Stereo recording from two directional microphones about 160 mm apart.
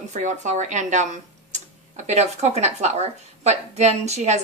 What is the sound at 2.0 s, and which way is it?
A woman's voice, 45° right (ahead or behind).